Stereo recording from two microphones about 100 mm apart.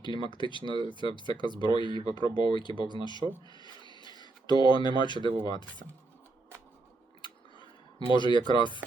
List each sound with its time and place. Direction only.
0.0 s speech: 50° left (ahead or behind)
1.8 s speech: 50° right (ahead or behind)
2.0 s speech: 45° left (ahead or behind)
7.2 s a sound: 50° left (ahead or behind)